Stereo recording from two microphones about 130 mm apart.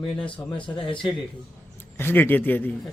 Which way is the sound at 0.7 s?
40° left (ahead or behind).